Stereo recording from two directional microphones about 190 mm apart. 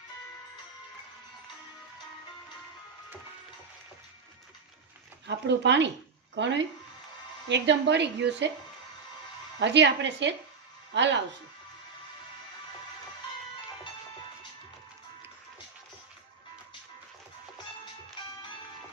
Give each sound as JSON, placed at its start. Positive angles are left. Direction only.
{"t": 5.2, "sound": "a woman's voice", "side_deg": -70}
{"t": 9.6, "sound": "a woman's voice", "side_deg": -70}